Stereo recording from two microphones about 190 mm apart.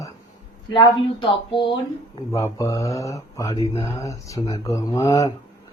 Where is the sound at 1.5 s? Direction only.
25° left (ahead or behind).